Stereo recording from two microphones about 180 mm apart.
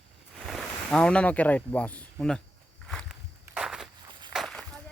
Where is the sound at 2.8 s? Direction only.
5° left (ahead or behind).